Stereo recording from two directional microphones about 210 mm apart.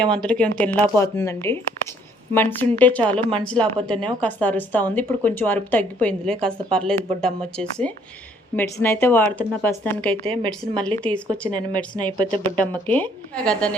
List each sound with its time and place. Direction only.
0.0 s a woman's voice: 5° left (ahead or behind)
3.8 s speech: 25° right (ahead or behind)
4.2 s a woman's voice: 5° left (ahead or behind)
10.2 s speech: 20° right (ahead or behind)
11.0 s a woman's voice: 5° left (ahead or behind)
11.9 s speech: 20° right (ahead or behind)
12.5 s a woman's voice: 5° left (ahead or behind)